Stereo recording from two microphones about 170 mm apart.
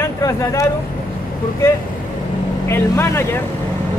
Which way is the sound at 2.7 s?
15° left (ahead or behind).